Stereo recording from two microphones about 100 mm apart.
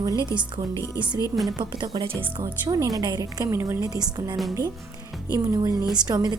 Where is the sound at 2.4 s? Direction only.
35° right (ahead or behind).